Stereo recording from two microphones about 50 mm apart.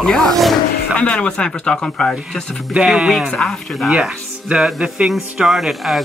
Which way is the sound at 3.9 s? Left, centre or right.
Right.